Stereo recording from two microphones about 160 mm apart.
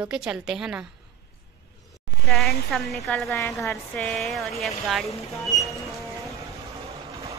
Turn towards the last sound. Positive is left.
turn(degrees=-20)  # may be behind; listen again after turning